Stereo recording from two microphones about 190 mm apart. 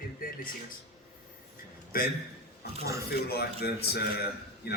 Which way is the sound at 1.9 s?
50° left (ahead or behind).